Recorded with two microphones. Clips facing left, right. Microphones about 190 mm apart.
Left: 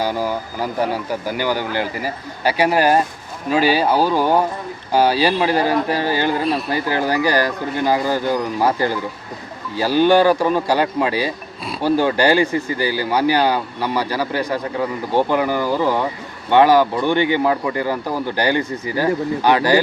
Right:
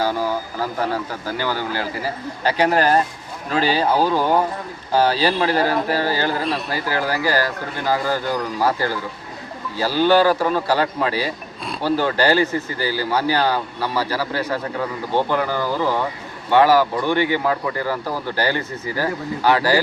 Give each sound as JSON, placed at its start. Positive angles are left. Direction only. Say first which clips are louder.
{"t": 0.0, "sound": "vehicle", "louder": "even", "side_deg": 15}
{"t": 1.2, "sound": "speech", "louder": "left 3 dB", "side_deg": 15}